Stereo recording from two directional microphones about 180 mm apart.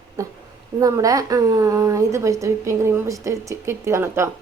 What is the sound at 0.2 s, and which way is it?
A woman's voice, 20° right (ahead or behind).